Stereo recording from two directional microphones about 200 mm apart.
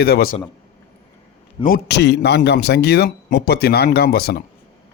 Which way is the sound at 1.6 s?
50° left (ahead or behind).